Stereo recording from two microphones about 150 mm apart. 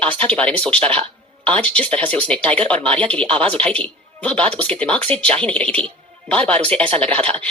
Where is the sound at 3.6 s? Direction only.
10° left (ahead or behind).